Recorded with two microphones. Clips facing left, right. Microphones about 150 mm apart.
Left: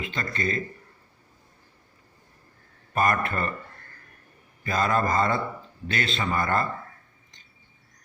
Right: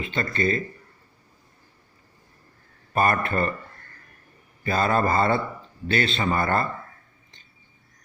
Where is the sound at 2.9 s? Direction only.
30° right (ahead or behind).